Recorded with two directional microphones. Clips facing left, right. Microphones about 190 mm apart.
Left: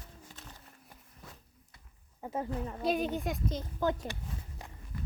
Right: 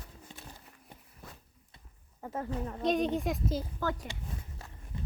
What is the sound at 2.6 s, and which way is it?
Speech, 5° left (ahead or behind).